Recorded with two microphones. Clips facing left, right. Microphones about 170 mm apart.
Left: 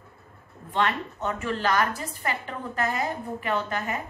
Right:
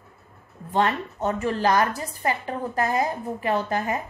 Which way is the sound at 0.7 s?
35° right (ahead or behind).